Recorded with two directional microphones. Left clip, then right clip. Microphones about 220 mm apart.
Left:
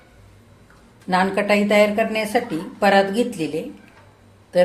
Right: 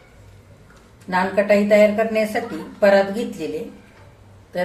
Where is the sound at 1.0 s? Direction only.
40° left (ahead or behind).